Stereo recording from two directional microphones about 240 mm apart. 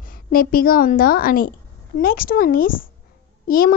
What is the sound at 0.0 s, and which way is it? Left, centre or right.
A woman's voice, left.